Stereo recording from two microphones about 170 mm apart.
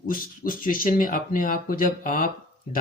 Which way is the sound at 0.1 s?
55° left (ahead or behind).